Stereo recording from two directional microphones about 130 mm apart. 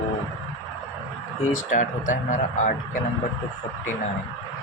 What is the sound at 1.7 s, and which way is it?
Speech, 75° left (ahead or behind).